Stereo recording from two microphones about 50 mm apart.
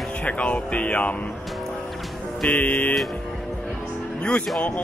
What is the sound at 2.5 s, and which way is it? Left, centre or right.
Music, left.